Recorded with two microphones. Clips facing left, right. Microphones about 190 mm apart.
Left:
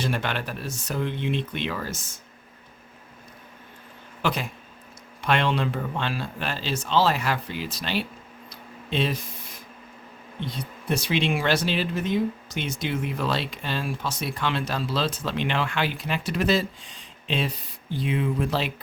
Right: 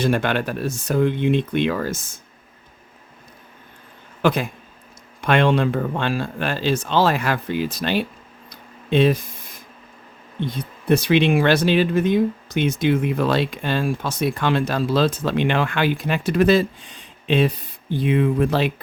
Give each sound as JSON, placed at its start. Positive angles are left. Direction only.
{"t": 0.0, "sound": "speech", "side_deg": -50}
{"t": 4.2, "sound": "speech", "side_deg": -55}
{"t": 10.4, "sound": "speech", "side_deg": -55}